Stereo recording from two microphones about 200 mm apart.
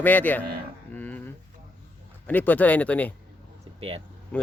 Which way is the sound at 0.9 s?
5° left (ahead or behind).